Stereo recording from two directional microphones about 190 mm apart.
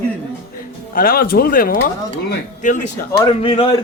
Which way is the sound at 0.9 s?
50° left (ahead or behind).